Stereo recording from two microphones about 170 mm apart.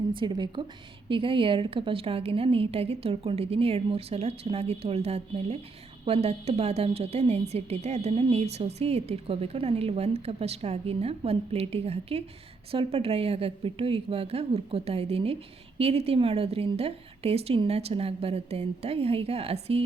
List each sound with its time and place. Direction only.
0.1 s a woman's voice: 30° right (ahead or behind)